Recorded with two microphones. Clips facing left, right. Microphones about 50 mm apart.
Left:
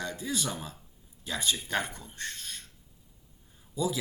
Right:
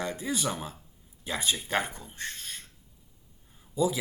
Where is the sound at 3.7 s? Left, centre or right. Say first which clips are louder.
Right 4 dB; centre.